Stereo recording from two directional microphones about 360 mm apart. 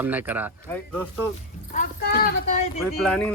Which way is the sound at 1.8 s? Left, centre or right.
Left.